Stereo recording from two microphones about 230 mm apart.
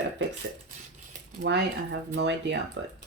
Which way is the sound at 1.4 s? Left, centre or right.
Right.